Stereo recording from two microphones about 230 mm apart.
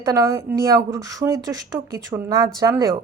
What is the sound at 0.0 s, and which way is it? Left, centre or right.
Speech, centre.